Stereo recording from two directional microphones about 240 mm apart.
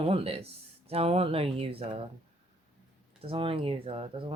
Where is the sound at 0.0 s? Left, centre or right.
Right.